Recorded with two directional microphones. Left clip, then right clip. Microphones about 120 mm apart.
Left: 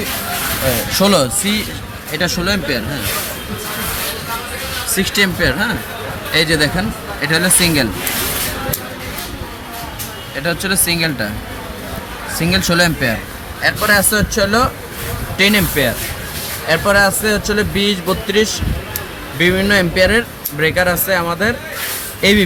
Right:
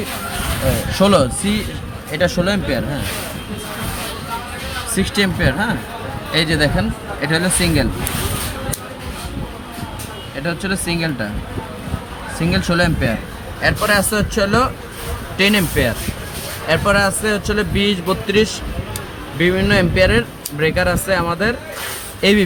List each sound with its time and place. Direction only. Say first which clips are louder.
0.9 s speech: right 1 dB; 15° right (ahead or behind)
2.1 s a man's voice: even; 55° right (ahead or behind)
4.9 s speech: left 4 dB; 90° right
6.3 s a man's voice: left 3 dB; 65° right (ahead or behind)
7.2 s speech: left 3 dB; 20° right (ahead or behind)
7.6 s speech: left 3 dB; centre (ahead or behind)
10.3 s speech: left 4 dB; centre (ahead or behind)
12.4 s speech: left 3 dB; 5° right (ahead or behind)